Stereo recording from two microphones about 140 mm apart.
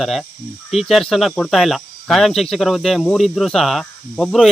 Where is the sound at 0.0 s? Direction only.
Centre (ahead or behind).